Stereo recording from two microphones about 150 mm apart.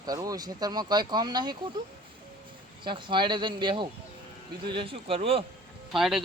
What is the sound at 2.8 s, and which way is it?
Speech, 35° right (ahead or behind).